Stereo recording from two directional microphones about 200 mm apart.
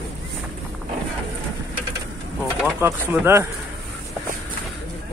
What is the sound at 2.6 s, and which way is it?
Speech, 10° right (ahead or behind).